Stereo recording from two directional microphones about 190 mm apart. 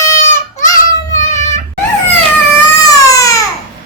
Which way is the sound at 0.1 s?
15° left (ahead or behind).